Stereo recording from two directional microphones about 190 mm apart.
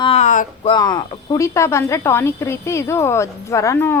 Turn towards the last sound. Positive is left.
turn(degrees=15)  # may be behind; listen again after turning